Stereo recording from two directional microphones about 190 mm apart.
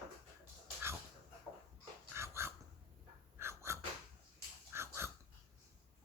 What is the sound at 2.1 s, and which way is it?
Dog, 15° right (ahead or behind).